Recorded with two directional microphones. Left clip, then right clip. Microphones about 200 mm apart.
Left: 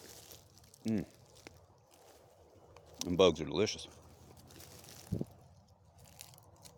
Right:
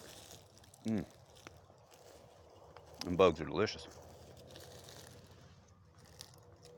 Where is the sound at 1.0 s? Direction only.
40° left (ahead or behind).